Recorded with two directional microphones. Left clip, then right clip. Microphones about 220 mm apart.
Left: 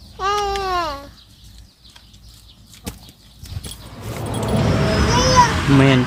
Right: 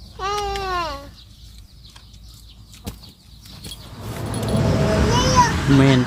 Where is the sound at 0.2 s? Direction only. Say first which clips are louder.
Left 4 dB; 35° left (ahead or behind).